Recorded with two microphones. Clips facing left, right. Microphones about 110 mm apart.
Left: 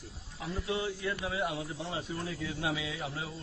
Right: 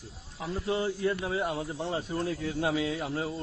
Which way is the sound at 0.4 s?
40° right (ahead or behind).